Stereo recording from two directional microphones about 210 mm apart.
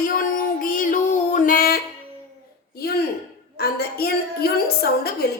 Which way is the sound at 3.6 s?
50° left (ahead or behind).